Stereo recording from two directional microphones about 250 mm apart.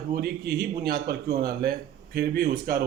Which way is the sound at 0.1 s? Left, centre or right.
Right.